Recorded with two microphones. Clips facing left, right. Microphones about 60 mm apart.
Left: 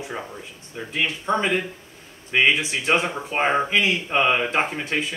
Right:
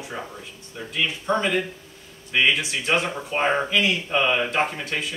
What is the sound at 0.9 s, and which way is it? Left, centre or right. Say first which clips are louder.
Speech: even; left.